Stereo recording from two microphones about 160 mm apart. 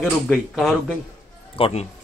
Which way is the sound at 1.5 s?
40° left (ahead or behind).